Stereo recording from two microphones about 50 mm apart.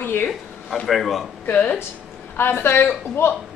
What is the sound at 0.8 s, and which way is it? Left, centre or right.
Speech, centre.